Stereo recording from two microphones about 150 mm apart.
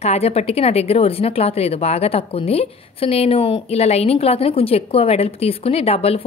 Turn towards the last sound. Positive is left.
turn(degrees=40)  # may be behind; listen again after turning